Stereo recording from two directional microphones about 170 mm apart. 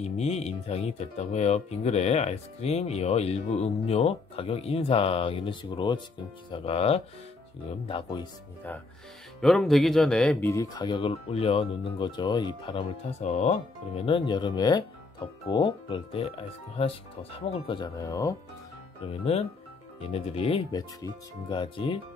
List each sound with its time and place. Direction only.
0.0 s speech: 40° left (ahead or behind)
8.7 s speech: 10° left (ahead or behind)
10.4 s speech: 20° left (ahead or behind)
13.2 s speech: 45° left (ahead or behind); by 18.3 s 20° left (ahead or behind)
20.0 s speech: 35° left (ahead or behind)
20.7 s speech: 25° left (ahead or behind)